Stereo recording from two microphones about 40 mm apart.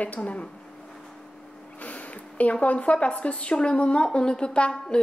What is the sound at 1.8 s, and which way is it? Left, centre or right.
A woman's voice, left.